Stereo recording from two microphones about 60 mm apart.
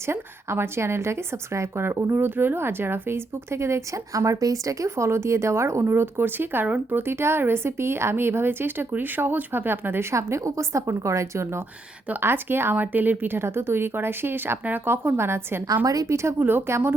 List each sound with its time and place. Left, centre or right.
0.1 s speech: right
5.0 s speech: right
12.2 s a woman's voice: right
15.8 s a woman's voice: right
16.4 s a woman's voice: right
16.6 s speech: right